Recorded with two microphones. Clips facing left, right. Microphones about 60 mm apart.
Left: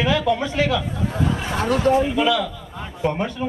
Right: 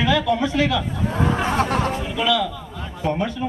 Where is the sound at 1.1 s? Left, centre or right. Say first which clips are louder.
Right 4 dB; right.